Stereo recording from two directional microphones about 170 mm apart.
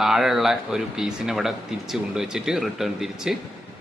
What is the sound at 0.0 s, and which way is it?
A man's voice, centre (ahead or behind).